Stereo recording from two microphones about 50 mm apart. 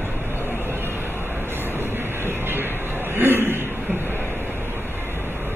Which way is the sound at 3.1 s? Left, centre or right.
Right.